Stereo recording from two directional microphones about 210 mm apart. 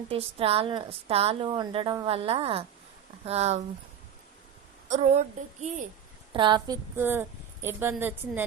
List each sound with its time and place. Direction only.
0.1 s a woman's voice: 25° right (ahead or behind)
4.9 s speech: 30° right (ahead or behind)
6.3 s a woman's voice: 20° right (ahead or behind)
6.9 s a woman's voice: 10° right (ahead or behind)